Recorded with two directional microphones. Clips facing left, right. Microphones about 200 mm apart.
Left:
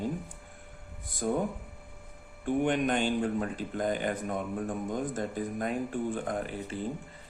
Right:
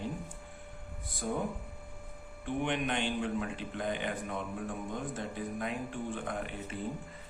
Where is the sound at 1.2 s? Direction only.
50° left (ahead or behind).